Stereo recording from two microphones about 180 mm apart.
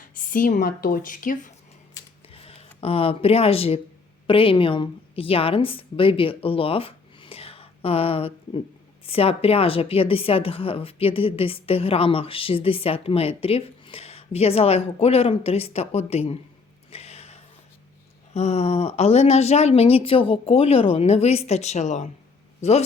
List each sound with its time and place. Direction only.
0.0 s speech: 50° left (ahead or behind)
2.3 s a woman's voice: 30° left (ahead or behind)
16.9 s a sound: 35° left (ahead or behind)
18.3 s a woman's voice: 35° left (ahead or behind)